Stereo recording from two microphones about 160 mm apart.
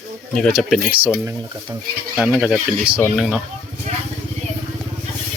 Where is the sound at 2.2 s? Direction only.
5° right (ahead or behind).